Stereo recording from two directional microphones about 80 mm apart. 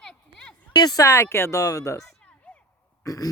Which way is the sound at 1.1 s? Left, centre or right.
Left.